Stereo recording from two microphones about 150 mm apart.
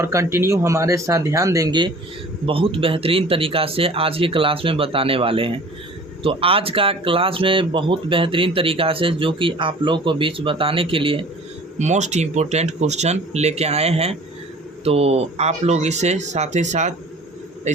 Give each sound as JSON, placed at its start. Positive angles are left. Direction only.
{"t": 0.0, "sound": "speech", "side_deg": -20}
{"t": 11.8, "sound": "speech", "side_deg": -50}